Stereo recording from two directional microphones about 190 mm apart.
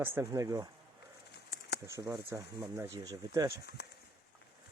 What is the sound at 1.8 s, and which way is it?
Speech, 20° right (ahead or behind).